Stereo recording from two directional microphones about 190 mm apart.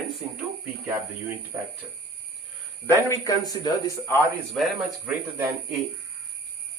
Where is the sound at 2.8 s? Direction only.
15° left (ahead or behind).